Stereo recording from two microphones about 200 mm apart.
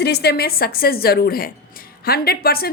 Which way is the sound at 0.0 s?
55° left (ahead or behind).